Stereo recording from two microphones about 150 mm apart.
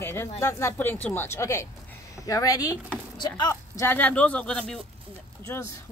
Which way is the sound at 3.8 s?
10° left (ahead or behind).